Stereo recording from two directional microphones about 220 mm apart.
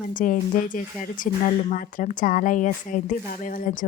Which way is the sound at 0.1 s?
40° left (ahead or behind).